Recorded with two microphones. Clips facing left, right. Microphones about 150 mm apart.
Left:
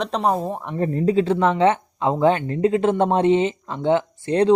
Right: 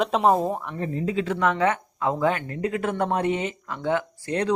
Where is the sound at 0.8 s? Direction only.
40° left (ahead or behind).